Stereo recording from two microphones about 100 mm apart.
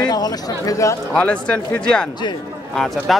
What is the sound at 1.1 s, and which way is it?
Speech, 10° left (ahead or behind).